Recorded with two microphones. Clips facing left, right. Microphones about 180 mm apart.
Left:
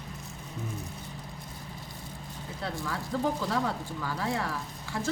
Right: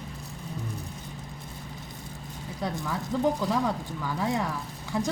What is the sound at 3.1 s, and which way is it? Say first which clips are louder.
Speech: right 3 dB; 15° right (ahead or behind).